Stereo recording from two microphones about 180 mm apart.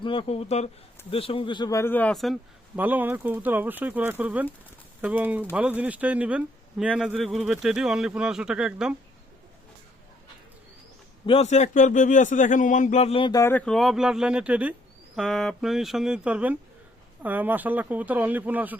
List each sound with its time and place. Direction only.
0.0 s a man's voice: 30° left (ahead or behind); by 9.0 s 5° right (ahead or behind)
11.3 s speech: 35° left (ahead or behind)
13.4 s a man's voice: 10° left (ahead or behind); by 18.8 s 10° right (ahead or behind)